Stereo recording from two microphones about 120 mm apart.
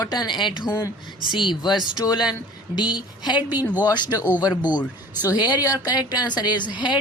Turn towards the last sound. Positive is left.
turn(degrees=40)  # may be behind; listen again after turning